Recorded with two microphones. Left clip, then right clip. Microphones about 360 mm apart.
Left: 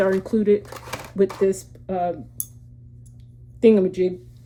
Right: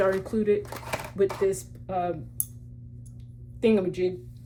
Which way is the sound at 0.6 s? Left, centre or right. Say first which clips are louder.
Right 1 dB; centre.